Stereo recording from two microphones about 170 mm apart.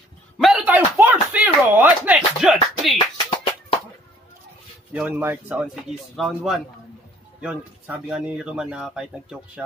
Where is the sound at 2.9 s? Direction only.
25° left (ahead or behind).